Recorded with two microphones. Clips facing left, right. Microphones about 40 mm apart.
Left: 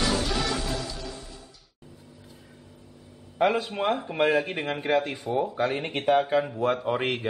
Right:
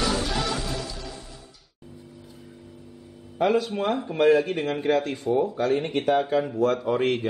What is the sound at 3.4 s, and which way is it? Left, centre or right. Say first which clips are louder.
Speech: right 1 dB; centre.